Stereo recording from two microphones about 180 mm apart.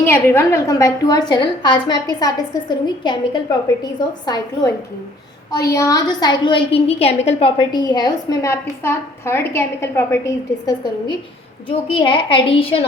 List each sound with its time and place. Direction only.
0.0 s a woman's voice: 15° left (ahead or behind); by 12.8 s 30° left (ahead or behind)